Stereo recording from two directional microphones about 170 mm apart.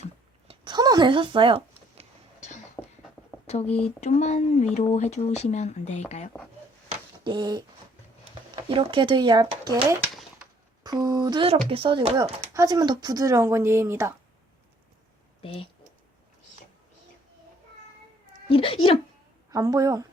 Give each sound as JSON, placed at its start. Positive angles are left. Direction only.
{"t": 0.4, "sound": "a sound", "side_deg": -25}
{"t": 2.8, "sound": "a sound", "side_deg": 10}
{"t": 3.4, "sound": "speech", "side_deg": 40}
{"t": 7.3, "sound": "speech", "side_deg": -25}
{"t": 8.7, "sound": "speech", "side_deg": -30}
{"t": 10.8, "sound": "speech", "side_deg": -25}
{"t": 15.4, "sound": "speech", "side_deg": 35}
{"t": 18.4, "sound": "speech", "side_deg": 30}
{"t": 19.5, "sound": "speech", "side_deg": -20}